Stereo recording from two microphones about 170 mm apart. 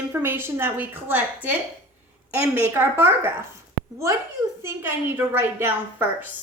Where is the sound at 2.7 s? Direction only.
10° right (ahead or behind).